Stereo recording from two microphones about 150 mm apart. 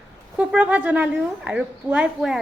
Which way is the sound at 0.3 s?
10° right (ahead or behind).